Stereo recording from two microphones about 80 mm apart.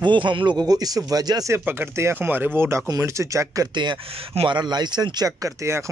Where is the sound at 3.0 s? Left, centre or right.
Right.